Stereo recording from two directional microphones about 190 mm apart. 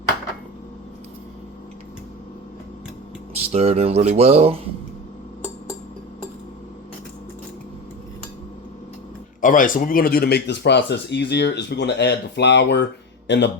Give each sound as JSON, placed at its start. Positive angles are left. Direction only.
{"t": 3.5, "sound": "speech", "side_deg": -35}
{"t": 9.4, "sound": "a man's voice", "side_deg": 45}